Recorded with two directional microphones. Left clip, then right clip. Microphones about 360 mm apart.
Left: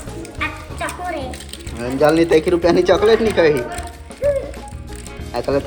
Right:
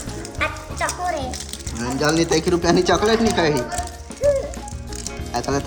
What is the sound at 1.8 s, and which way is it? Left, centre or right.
Speech, centre.